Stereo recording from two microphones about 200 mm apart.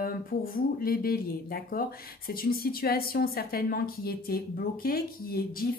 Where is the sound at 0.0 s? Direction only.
50° left (ahead or behind).